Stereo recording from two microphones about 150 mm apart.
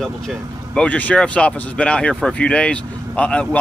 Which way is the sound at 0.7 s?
10° left (ahead or behind).